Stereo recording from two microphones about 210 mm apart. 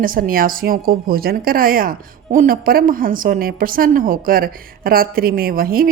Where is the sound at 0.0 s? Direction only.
40° right (ahead or behind).